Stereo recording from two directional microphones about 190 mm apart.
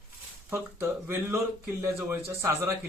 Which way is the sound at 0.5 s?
10° right (ahead or behind).